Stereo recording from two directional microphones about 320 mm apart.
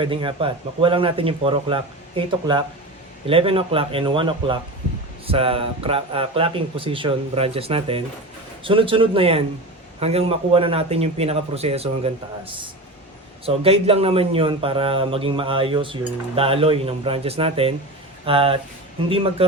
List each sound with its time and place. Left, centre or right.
0.0 s a man's voice: centre
13.4 s speech: centre